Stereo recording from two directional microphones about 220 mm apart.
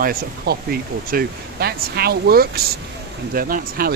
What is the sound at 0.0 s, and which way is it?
Speech, 45° right (ahead or behind).